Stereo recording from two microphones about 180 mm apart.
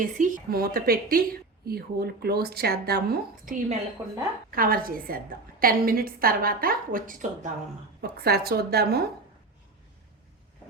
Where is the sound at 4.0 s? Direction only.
10° right (ahead or behind).